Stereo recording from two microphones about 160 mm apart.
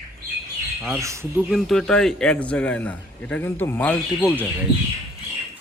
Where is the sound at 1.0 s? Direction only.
20° right (ahead or behind).